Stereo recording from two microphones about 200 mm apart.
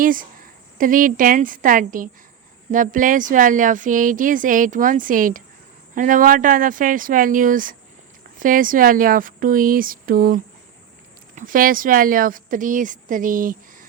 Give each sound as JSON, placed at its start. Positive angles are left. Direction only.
{"t": 0.0, "sound": "a woman's voice", "side_deg": -45}